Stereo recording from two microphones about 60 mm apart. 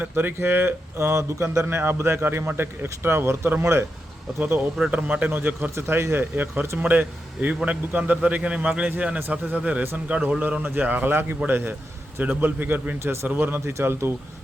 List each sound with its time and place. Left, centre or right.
0.0 s speech: right
1.6 s speech: right
4.9 s a man's voice: right
5.3 s speech: right
5.7 s speech: right
6.3 s a man's voice: right
13.7 s speech: right